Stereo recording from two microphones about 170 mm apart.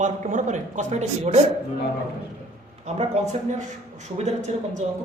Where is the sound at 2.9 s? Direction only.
40° right (ahead or behind).